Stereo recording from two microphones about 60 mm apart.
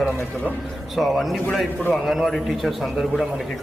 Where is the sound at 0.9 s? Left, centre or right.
Centre.